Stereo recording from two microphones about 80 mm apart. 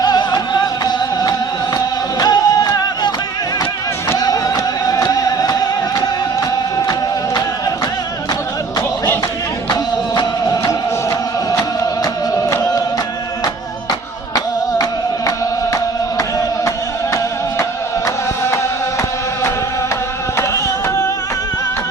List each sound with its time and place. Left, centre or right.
0.0 s music: left
4.2 s music: left
20.3 s a sound: left